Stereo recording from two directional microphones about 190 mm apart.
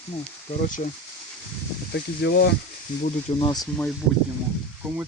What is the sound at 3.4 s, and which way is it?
Speech, 20° left (ahead or behind).